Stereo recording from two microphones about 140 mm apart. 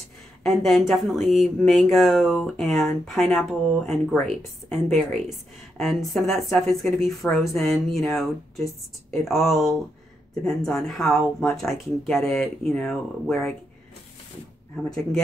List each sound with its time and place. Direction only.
0.4 s a woman's voice: centre (ahead or behind)
14.9 s a woman's voice: 5° left (ahead or behind)